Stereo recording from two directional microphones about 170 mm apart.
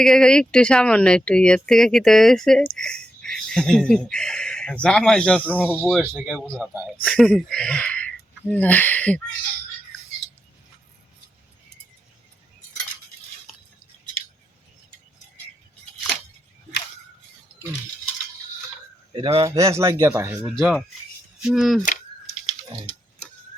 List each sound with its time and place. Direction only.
0.0 s speech: 5° left (ahead or behind)
5.6 s speech: 5° right (ahead or behind)
6.9 s speech: 5° left (ahead or behind)
13.5 s a sound: centre (ahead or behind)
19.1 s a man's voice: 35° right (ahead or behind)
19.5 s speech: 15° right (ahead or behind); by 21.8 s centre (ahead or behind)